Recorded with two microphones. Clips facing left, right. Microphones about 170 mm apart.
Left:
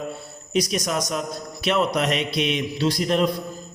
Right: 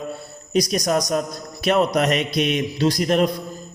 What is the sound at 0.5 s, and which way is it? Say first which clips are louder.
A man's voice: right 4 dB; 40° right (ahead or behind).